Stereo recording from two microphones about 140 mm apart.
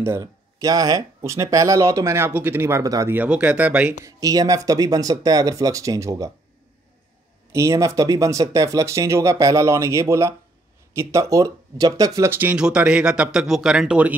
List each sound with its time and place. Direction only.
0.0 s speech: 20° right (ahead or behind)
4.0 s speech: 25° right (ahead or behind)
7.5 s speech: 20° right (ahead or behind)